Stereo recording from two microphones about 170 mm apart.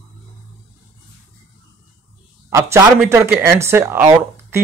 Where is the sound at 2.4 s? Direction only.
15° right (ahead or behind).